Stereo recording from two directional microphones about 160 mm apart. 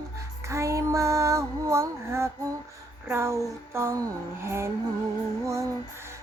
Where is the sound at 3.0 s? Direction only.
15° right (ahead or behind).